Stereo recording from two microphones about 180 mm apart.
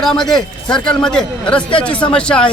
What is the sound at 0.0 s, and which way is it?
A man's voice, centre (ahead or behind).